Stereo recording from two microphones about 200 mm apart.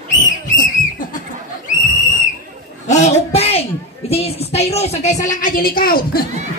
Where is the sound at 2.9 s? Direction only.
35° left (ahead or behind).